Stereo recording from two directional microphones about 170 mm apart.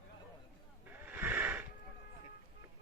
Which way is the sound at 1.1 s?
10° right (ahead or behind).